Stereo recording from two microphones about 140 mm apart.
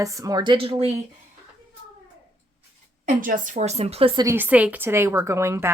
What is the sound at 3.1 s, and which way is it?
Speech, 70° right (ahead or behind).